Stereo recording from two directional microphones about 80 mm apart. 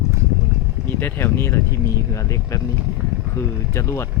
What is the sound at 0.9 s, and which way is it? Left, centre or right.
Speech, left.